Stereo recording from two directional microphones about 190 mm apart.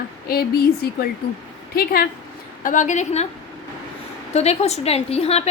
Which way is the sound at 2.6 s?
40° left (ahead or behind).